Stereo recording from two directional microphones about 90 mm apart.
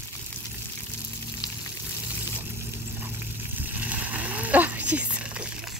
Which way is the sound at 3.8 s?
20° right (ahead or behind).